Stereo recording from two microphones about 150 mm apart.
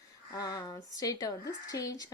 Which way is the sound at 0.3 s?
25° left (ahead or behind).